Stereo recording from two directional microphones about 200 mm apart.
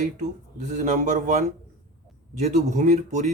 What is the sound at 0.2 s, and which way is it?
A man's voice, 35° right (ahead or behind).